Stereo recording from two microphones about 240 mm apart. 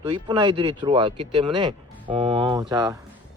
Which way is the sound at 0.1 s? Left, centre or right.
Centre.